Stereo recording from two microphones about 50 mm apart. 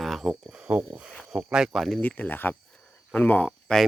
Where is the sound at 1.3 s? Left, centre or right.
Centre.